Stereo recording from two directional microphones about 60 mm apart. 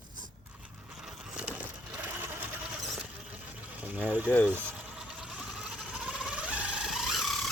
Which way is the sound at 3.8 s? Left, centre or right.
Right.